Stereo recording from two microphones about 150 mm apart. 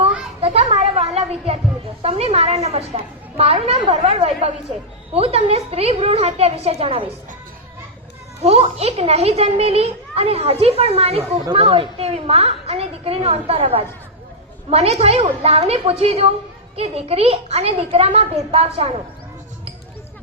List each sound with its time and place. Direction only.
0.4 s a sound: 45° right (ahead or behind)
2.0 s a child's voice: 40° right (ahead or behind)
8.4 s a child's voice: 40° right (ahead or behind)